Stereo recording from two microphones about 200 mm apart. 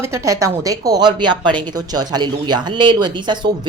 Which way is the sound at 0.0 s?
15° right (ahead or behind).